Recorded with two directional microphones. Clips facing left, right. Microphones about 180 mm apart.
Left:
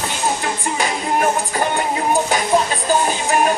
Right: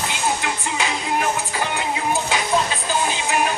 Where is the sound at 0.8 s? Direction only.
45° left (ahead or behind).